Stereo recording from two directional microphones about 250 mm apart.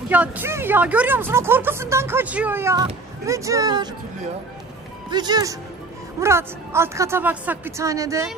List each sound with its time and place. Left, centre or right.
0.1 s speech: centre
5.1 s speech: centre